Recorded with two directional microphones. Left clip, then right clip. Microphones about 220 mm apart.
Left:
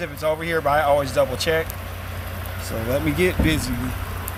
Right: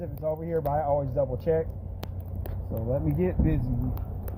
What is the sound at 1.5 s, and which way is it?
Speech, 15° left (ahead or behind).